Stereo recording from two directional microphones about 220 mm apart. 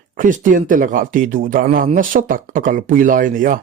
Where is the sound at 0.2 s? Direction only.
35° right (ahead or behind).